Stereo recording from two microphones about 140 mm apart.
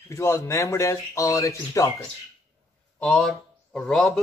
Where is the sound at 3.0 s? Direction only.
Centre (ahead or behind).